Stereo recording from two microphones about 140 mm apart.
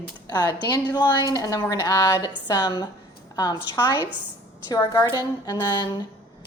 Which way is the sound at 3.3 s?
30° left (ahead or behind).